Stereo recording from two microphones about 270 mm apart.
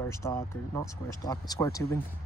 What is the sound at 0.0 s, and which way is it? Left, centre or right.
Speech, centre.